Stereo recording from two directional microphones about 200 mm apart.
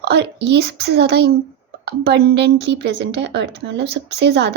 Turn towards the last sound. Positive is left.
turn(degrees=-55)  # may be behind; listen again after turning